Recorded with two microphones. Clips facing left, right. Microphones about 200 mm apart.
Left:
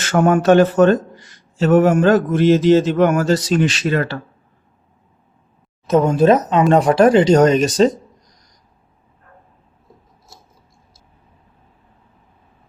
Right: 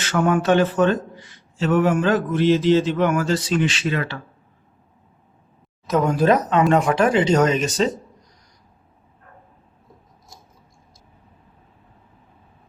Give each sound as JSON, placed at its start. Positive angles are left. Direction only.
{"t": 0.0, "sound": "a man's voice", "side_deg": 45}
{"t": 5.9, "sound": "speech", "side_deg": 25}
{"t": 6.7, "sound": "speech", "side_deg": 35}